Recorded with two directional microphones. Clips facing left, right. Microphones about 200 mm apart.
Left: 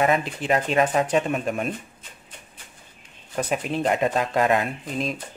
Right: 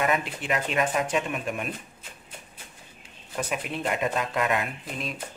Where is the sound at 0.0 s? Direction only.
35° left (ahead or behind).